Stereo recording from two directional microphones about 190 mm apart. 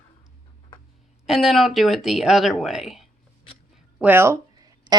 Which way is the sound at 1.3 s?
Centre (ahead or behind).